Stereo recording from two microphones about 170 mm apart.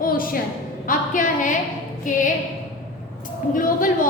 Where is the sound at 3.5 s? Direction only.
50° left (ahead or behind).